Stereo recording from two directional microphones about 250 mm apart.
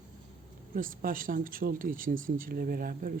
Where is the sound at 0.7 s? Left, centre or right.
Right.